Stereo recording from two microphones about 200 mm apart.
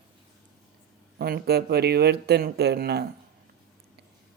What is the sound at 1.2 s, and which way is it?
Speech, 55° right (ahead or behind).